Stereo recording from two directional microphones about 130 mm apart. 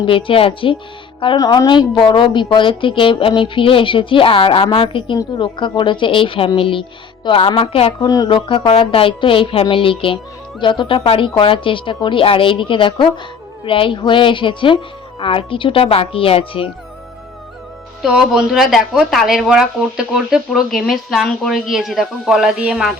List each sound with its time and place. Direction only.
0.0 s a woman's voice: 40° left (ahead or behind)
8.0 s speech: 30° left (ahead or behind)
8.4 s a woman's voice: 40° left (ahead or behind)
18.0 s speech: 5° right (ahead or behind)